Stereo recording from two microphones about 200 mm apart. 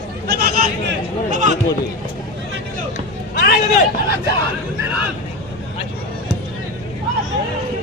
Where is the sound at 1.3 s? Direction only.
40° right (ahead or behind).